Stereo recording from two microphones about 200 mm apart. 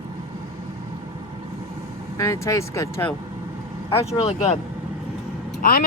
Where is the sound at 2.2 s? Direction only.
15° left (ahead or behind).